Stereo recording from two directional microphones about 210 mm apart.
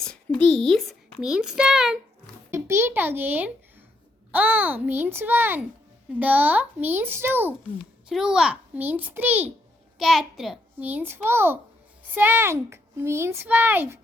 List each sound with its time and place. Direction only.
0.0 s a child's voice: 5° left (ahead or behind)